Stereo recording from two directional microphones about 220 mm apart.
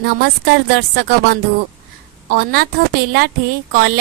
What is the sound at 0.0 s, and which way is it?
A woman's voice, 45° right (ahead or behind).